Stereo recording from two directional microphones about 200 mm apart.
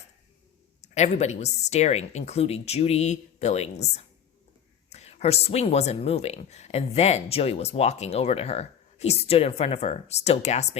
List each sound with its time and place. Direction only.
0.8 s speech: 35° left (ahead or behind)